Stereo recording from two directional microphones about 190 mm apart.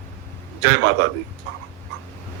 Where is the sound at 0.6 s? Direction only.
70° right (ahead or behind).